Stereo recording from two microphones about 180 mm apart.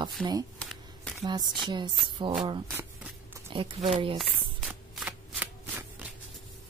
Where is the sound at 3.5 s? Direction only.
30° right (ahead or behind).